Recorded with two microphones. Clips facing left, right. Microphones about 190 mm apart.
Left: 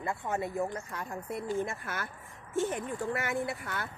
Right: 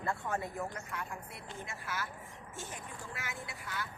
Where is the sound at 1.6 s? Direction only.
50° left (ahead or behind).